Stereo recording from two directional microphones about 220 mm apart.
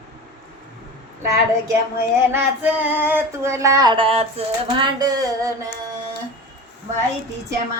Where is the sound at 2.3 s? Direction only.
10° right (ahead or behind).